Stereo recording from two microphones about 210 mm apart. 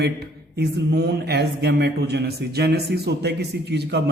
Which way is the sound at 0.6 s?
50° right (ahead or behind).